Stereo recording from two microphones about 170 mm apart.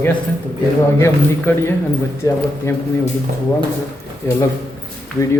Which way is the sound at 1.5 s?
15° left (ahead or behind).